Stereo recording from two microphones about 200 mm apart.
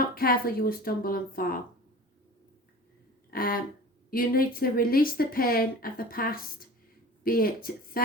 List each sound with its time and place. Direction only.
0.1 s speech: 45° left (ahead or behind)
3.2 s a sound: 45° left (ahead or behind)
4.1 s speech: 45° left (ahead or behind)